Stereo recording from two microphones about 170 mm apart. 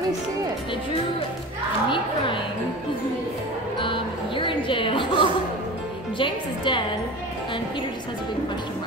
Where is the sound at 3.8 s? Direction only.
30° left (ahead or behind).